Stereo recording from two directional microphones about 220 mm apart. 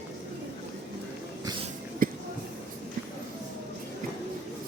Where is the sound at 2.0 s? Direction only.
40° right (ahead or behind).